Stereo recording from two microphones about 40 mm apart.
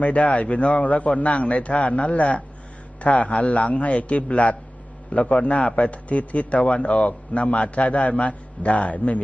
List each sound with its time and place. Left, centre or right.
0.0 s a man's voice: left